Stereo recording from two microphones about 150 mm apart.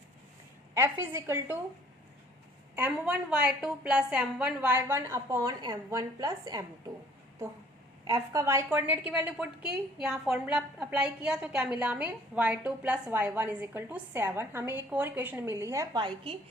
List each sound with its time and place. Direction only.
0.7 s a woman's voice: 15° right (ahead or behind)
2.7 s a woman's voice: 10° right (ahead or behind)
8.0 s a woman's voice: 20° right (ahead or behind)